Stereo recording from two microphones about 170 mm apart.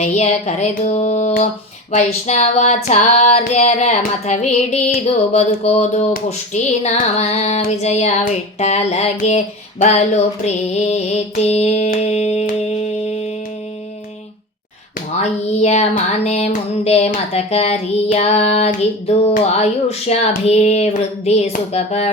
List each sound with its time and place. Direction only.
0.0 s female singing: 45° left (ahead or behind)
7.8 s child singing: 45° left (ahead or behind)
11.9 s humming: 40° left (ahead or behind)
15.2 s child singing: 40° left (ahead or behind)